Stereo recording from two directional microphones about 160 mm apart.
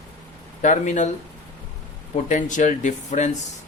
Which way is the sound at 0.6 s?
50° left (ahead or behind).